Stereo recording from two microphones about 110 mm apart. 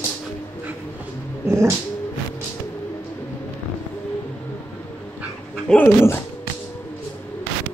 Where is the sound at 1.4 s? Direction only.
25° right (ahead or behind).